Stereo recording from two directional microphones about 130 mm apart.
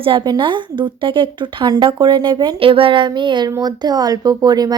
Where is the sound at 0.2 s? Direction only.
35° right (ahead or behind).